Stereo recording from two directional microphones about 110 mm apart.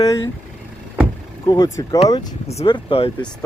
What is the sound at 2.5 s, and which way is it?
Speech, 75° left (ahead or behind).